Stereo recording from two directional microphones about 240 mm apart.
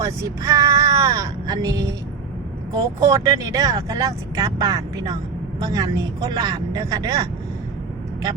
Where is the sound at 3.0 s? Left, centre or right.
Centre.